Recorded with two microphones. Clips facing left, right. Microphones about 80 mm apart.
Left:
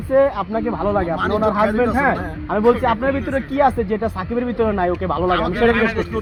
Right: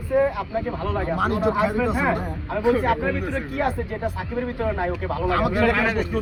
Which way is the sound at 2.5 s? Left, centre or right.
Left.